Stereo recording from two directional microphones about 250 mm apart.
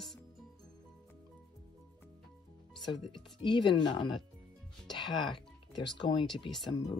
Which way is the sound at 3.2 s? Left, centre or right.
Centre.